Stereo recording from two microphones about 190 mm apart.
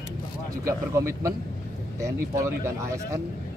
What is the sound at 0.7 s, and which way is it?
Speech, 15° right (ahead or behind).